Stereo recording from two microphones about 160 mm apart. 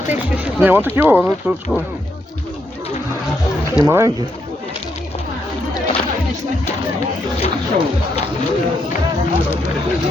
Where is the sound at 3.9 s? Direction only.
15° right (ahead or behind).